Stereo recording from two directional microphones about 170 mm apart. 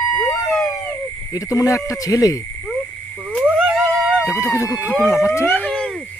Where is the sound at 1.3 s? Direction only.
20° left (ahead or behind).